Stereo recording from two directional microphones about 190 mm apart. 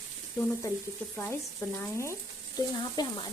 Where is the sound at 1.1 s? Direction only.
15° left (ahead or behind).